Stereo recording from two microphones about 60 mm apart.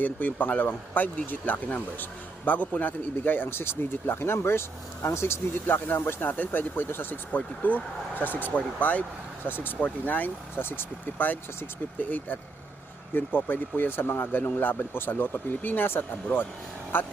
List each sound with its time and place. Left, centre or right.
0.0 s speech: left